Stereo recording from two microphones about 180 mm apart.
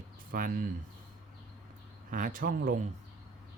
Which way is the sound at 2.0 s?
50° right (ahead or behind).